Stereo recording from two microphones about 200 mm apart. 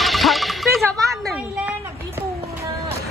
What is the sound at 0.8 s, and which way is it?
Speech, 15° right (ahead or behind).